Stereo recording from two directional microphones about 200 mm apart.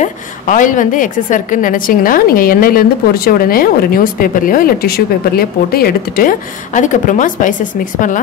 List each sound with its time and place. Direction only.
0.0 s a woman's voice: 40° left (ahead or behind)